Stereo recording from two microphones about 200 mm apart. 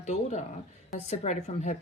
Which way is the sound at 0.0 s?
35° left (ahead or behind).